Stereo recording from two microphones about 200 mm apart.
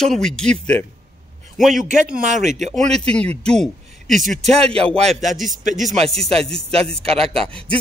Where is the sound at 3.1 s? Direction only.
5° left (ahead or behind).